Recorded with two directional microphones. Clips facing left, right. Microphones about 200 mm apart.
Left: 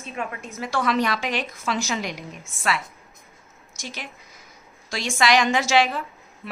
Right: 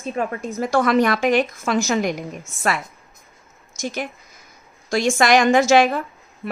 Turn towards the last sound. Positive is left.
turn(degrees=-50)  # may be behind; listen again after turning